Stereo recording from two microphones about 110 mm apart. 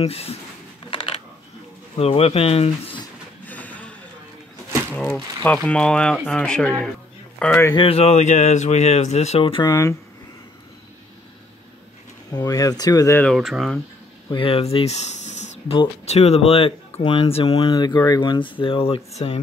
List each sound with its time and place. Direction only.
0.0 s speech: 65° left (ahead or behind)
0.8 s typing: 55° left (ahead or behind)
2.0 s speech: 60° left (ahead or behind)
3.4 s vehicle: 15° left (ahead or behind)
5.1 s speech: 15° left (ahead or behind)
7.7 s speech: 60° left (ahead or behind); by 9.4 s 80° left
9.4 s speech: 50° left (ahead or behind)
9.7 s speech: 30° left (ahead or behind)
12.3 s speech: 35° left (ahead or behind)
13.2 s speech: centre (ahead or behind)
14.3 s speech: 55° left (ahead or behind)
16.1 s speech: 75° left (ahead or behind)
17.6 s speech: 40° left (ahead or behind); by 19.4 s 65° left (ahead or behind)